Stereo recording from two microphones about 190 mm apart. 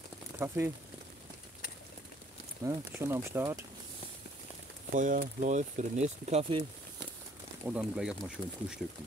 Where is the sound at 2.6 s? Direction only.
15° right (ahead or behind).